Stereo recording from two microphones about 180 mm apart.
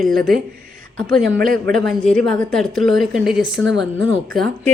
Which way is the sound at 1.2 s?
55° right (ahead or behind).